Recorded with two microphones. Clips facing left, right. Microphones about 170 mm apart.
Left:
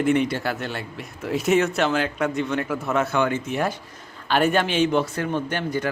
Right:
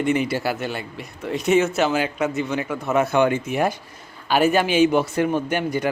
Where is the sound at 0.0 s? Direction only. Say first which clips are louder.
Even; 5° right (ahead or behind).